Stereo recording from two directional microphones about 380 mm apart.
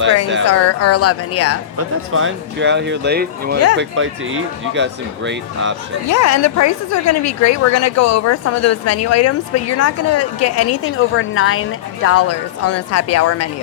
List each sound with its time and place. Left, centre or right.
0.4 s a woman's voice: left
2.1 s speech: right
6.1 s a woman's voice: left